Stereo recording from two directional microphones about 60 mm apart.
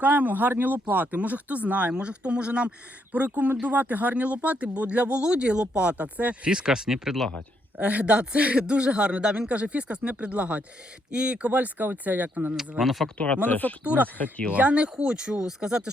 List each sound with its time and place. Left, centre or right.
0.0 s speech: right
6.5 s speech: centre
7.8 s speech: right
12.5 s speech: centre
13.1 s speech: left
13.8 s speech: right
14.2 s speech: left
14.5 s speech: right